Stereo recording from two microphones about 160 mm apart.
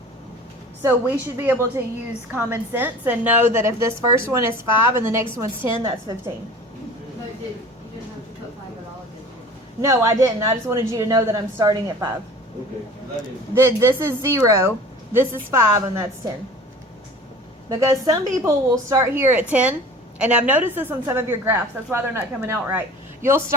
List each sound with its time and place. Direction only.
0.8 s a woman's voice: 10° right (ahead or behind)
9.8 s a woman's voice: 20° right (ahead or behind)
13.5 s a woman's voice: 15° right (ahead or behind)
17.7 s a woman's voice: 20° right (ahead or behind)